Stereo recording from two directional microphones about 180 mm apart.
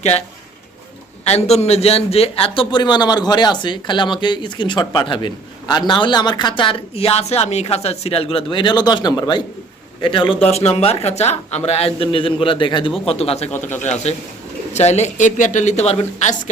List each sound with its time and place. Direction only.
1.2 s a man's voice: 35° left (ahead or behind)